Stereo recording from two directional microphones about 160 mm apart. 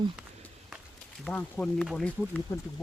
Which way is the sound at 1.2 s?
5° left (ahead or behind).